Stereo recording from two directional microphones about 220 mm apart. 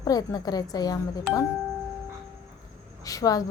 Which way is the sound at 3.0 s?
15° left (ahead or behind).